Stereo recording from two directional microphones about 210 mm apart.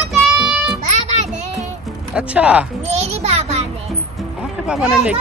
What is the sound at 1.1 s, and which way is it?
Music, 30° right (ahead or behind).